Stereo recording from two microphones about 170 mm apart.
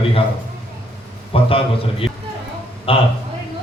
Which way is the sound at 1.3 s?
30° left (ahead or behind).